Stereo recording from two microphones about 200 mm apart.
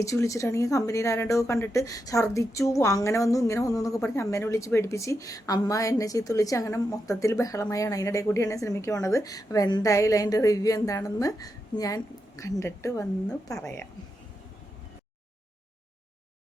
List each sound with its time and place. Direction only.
0.0 s a woman's voice: 15° left (ahead or behind)
13.2 s a woman's voice: 5° left (ahead or behind)